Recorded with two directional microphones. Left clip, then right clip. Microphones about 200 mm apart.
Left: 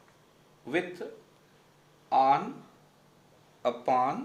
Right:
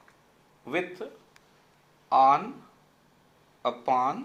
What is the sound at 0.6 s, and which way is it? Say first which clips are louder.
Speech: right 1 dB; 5° right (ahead or behind).